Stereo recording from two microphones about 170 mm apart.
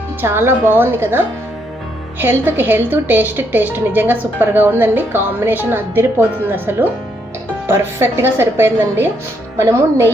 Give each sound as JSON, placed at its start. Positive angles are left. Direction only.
{"t": 0.2, "sound": "a woman's voice", "side_deg": -15}